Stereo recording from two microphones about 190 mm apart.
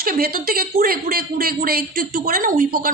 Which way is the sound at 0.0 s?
50° right (ahead or behind).